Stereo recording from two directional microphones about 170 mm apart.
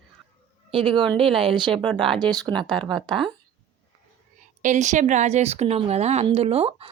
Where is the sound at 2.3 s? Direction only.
25° right (ahead or behind).